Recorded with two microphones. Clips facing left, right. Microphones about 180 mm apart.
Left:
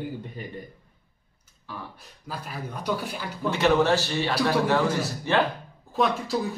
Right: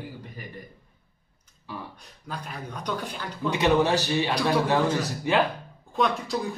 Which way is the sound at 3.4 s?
15° right (ahead or behind).